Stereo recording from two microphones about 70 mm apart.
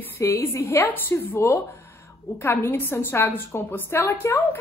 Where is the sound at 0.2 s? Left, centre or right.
Left.